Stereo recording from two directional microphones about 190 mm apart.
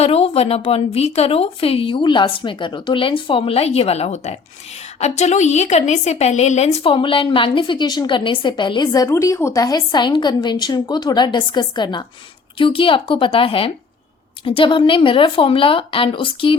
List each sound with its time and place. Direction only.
0.0 s a woman's voice: 30° left (ahead or behind)